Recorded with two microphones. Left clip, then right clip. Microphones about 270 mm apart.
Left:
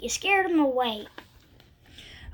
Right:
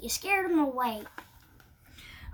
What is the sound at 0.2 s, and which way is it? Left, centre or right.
Speech, centre.